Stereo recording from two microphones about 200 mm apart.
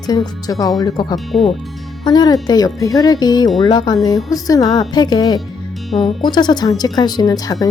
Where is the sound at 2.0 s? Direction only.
20° left (ahead or behind).